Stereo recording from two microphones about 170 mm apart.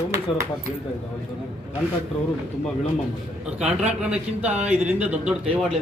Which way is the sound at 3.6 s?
5° right (ahead or behind).